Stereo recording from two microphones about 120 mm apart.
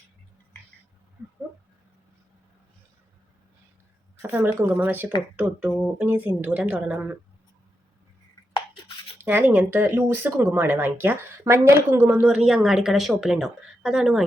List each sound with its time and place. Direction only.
4.3 s speech: 15° right (ahead or behind)
9.2 s speech: 15° right (ahead or behind)
12.2 s a woman's voice: 5° right (ahead or behind)